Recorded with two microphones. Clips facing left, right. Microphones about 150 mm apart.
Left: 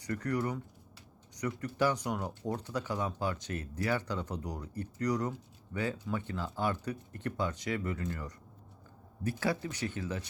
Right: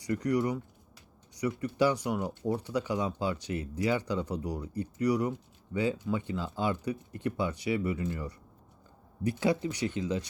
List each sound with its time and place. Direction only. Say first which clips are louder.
0.0 s speech: right 5 dB; 10° right (ahead or behind)